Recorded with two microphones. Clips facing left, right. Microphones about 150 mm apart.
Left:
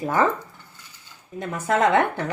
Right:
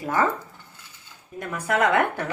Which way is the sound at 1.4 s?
20° left (ahead or behind).